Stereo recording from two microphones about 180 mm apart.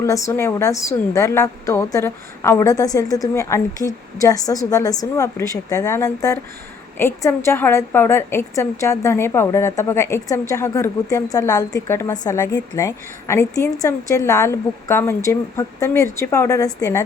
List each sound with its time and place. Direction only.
0.0 s a woman's voice: 15° left (ahead or behind)